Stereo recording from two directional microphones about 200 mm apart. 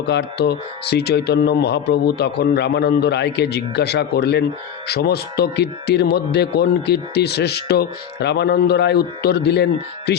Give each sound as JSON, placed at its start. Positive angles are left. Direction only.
{"t": 0.0, "sound": "a man's voice", "side_deg": 55}